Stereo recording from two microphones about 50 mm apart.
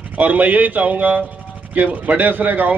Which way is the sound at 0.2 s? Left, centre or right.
Right.